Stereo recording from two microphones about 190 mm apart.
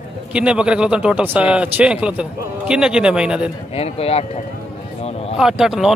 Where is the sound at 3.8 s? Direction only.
30° left (ahead or behind).